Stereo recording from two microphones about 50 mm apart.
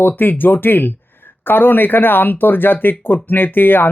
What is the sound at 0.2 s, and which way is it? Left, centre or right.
Speech, left.